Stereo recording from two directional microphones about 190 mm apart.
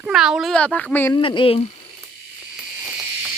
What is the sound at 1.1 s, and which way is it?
Speech, 25° left (ahead or behind).